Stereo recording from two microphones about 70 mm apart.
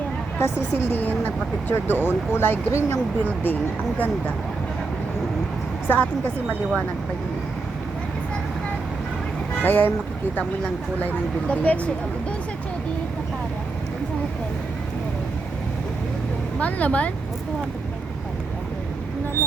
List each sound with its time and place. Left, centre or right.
0.3 s a woman's voice: left
5.9 s speech: left
9.6 s speech: left
11.0 s speech: left
16.6 s speech: left